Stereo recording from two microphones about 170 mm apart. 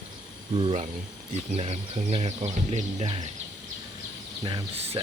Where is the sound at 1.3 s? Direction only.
40° right (ahead or behind).